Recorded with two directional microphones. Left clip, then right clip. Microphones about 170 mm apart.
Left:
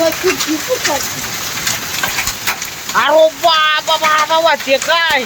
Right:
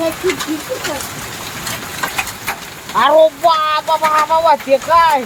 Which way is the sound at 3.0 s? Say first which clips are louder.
Even; 10° right (ahead or behind).